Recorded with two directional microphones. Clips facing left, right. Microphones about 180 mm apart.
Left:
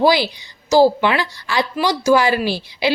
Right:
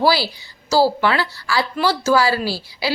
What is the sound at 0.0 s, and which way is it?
A woman's voice, 20° left (ahead or behind).